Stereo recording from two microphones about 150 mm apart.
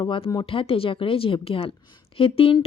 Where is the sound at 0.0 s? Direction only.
35° left (ahead or behind).